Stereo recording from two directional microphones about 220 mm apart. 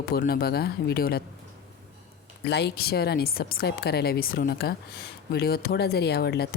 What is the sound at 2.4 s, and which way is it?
Speech, 50° left (ahead or behind).